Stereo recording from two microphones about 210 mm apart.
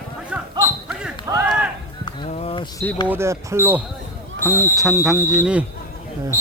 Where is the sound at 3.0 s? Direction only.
10° right (ahead or behind).